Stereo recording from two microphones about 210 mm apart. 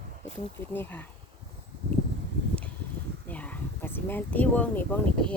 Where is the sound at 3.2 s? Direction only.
5° left (ahead or behind).